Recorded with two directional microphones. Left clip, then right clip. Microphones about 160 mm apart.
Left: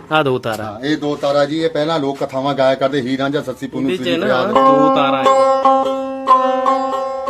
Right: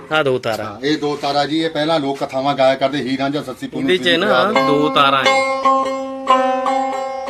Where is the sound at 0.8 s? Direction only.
45° left (ahead or behind).